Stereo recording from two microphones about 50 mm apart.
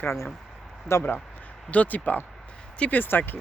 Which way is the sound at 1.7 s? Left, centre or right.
Left.